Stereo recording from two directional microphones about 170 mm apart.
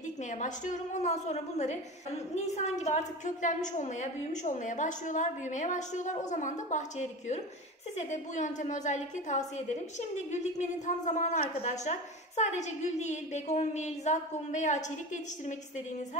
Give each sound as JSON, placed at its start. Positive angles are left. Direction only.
{"t": 0.3, "sound": "a woman's voice", "side_deg": 45}